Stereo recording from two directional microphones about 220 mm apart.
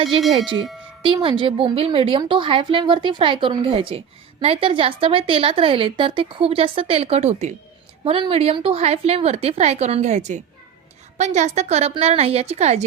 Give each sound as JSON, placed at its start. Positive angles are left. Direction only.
{"t": 1.0, "sound": "a woman's voice", "side_deg": -25}